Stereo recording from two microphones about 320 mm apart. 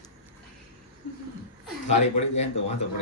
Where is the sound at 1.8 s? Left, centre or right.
Left.